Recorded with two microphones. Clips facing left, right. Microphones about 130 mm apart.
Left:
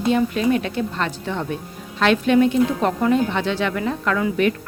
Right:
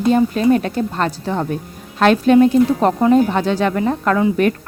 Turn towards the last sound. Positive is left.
turn(degrees=-40)  # may be behind; listen again after turning